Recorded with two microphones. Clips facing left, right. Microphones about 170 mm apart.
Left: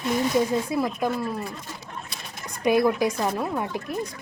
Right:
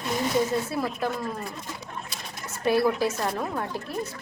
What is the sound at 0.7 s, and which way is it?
Speech, 15° left (ahead or behind).